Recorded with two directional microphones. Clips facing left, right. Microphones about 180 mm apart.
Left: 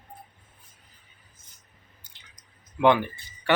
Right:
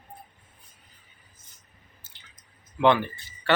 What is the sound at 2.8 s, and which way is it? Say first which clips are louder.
Speech: left 1 dB; 15° left (ahead or behind).